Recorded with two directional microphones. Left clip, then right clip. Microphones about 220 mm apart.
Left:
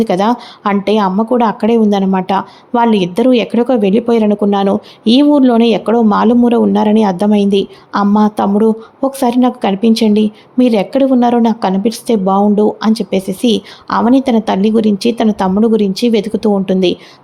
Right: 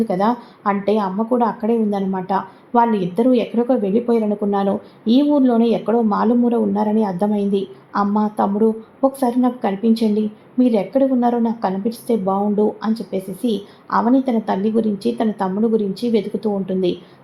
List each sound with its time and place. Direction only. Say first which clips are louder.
0.0 s speech: left 6 dB; 35° left (ahead or behind)